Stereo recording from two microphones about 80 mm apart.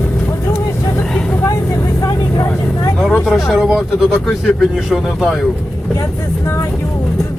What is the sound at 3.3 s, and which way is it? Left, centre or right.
Speech, centre.